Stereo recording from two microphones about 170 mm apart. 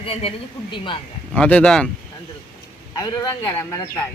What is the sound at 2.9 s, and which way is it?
Speech, 25° left (ahead or behind).